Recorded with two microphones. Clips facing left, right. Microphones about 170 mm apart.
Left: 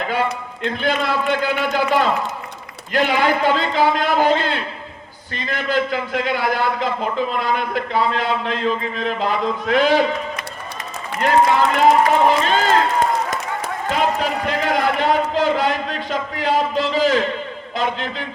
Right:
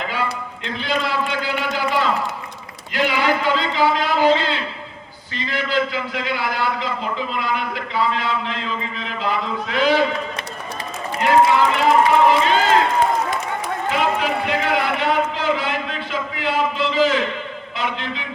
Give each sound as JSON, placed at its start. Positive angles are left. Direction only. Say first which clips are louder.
{"t": 0.6, "sound": "a man's voice", "louder": "left 3 dB", "side_deg": 50}
{"t": 11.7, "sound": "a man's voice", "louder": "left 1 dB", "side_deg": 45}
{"t": 13.9, "sound": "a man's voice", "louder": "left 1 dB", "side_deg": 40}